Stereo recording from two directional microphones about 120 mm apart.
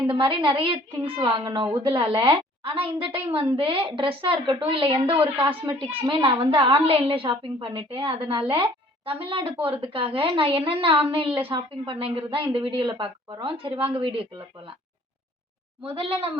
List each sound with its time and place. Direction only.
0.1 s a woman's voice: 45° right (ahead or behind)
6.1 s a child's voice: 35° right (ahead or behind)